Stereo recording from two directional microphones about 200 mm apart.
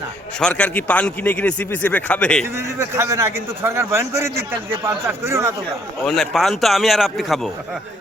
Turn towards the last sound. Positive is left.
turn(degrees=0)  # may be behind; listen again after turning